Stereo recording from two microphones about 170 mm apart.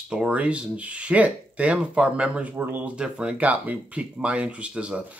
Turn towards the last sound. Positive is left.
turn(degrees=-5)  # may be behind; listen again after turning